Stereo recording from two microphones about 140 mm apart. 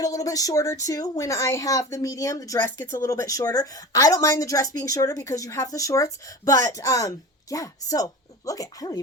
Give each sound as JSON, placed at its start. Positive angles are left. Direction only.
{"t": 0.0, "sound": "a woman's voice", "side_deg": 25}